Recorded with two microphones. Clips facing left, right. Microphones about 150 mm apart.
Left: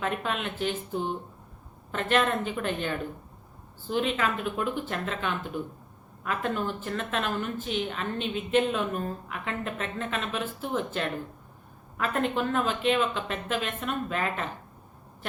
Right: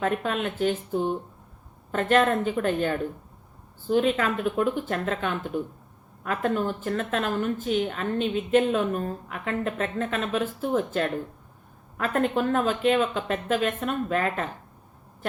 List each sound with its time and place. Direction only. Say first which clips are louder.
0.0 s a woman's voice: right 4 dB; 45° right (ahead or behind)